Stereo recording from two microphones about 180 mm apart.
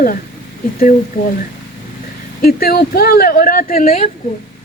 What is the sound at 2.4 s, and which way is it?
Speech, 55° left (ahead or behind).